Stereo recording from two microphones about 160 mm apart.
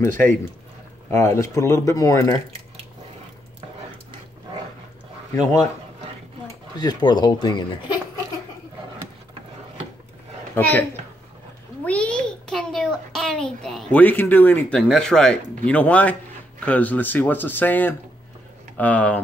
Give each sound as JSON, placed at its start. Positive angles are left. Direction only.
{"t": 1.1, "sound": "speech", "side_deg": 15}
{"t": 5.3, "sound": "speech", "side_deg": 25}
{"t": 6.8, "sound": "speech", "side_deg": 25}
{"t": 10.5, "sound": "a woman's voice", "side_deg": 10}